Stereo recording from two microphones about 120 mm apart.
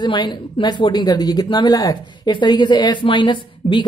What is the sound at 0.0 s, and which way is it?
Speech, 40° left (ahead or behind).